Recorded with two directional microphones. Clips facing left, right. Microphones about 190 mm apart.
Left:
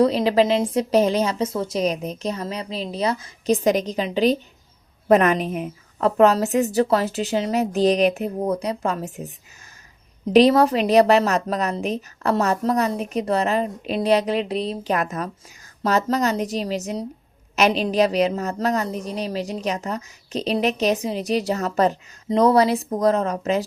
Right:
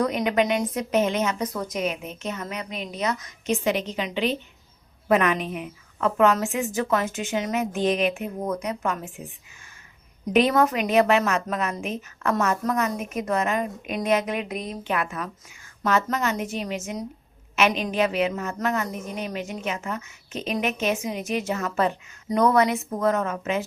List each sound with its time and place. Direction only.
0.0 s a woman's voice: 30° left (ahead or behind)